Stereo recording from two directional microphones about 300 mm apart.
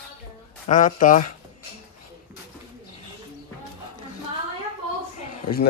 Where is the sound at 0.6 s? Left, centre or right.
Left.